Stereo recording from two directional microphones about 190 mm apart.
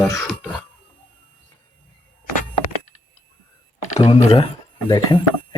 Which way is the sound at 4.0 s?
30° left (ahead or behind).